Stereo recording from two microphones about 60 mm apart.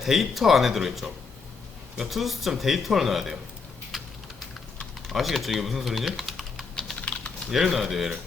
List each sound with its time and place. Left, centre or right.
0.0 s speech: centre
3.9 s typing: centre
5.1 s speech: centre
7.0 s typing: centre
7.5 s speech: centre